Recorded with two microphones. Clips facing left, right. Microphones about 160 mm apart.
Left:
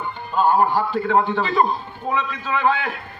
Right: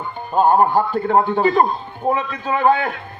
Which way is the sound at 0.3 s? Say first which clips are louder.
Right 3 dB; 45° right (ahead or behind).